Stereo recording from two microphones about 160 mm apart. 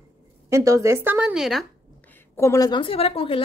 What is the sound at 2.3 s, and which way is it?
A woman's voice, 20° left (ahead or behind).